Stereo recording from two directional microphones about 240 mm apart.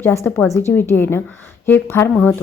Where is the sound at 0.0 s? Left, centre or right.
Centre.